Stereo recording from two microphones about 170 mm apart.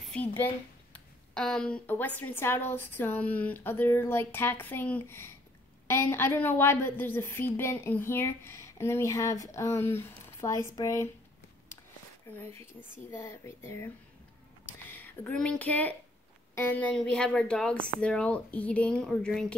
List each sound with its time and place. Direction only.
0.0 s a sound: 5° left (ahead or behind)
0.9 s a woman's voice: 5° left (ahead or behind)
13.1 s a woman's voice: 15° left (ahead or behind)